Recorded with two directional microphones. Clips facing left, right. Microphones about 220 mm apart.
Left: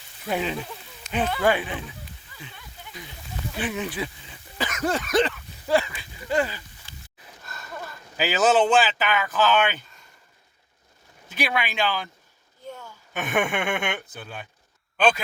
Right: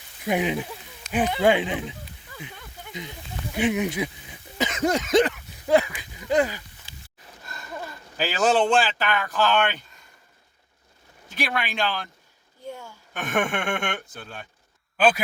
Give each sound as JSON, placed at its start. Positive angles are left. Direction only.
{"t": 0.3, "sound": "speech", "side_deg": -15}
{"t": 4.7, "sound": "a sound", "side_deg": -20}
{"t": 8.1, "sound": "speech", "side_deg": 5}
{"t": 11.3, "sound": "speech", "side_deg": 0}
{"t": 12.6, "sound": "a sound", "side_deg": -10}
{"t": 13.1, "sound": "speech", "side_deg": 5}